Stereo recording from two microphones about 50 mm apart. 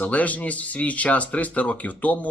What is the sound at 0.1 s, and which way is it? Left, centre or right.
Speech, left.